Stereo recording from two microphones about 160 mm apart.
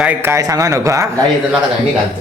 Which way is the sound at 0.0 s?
10° right (ahead or behind).